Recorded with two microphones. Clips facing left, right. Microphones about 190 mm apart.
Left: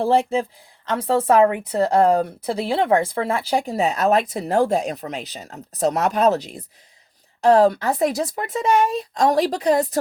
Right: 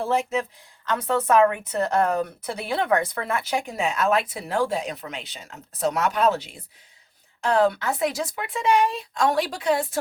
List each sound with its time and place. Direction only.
0.0 s speech: 30° left (ahead or behind)